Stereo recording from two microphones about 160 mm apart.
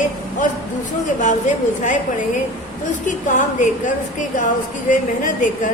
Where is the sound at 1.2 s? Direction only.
50° left (ahead or behind).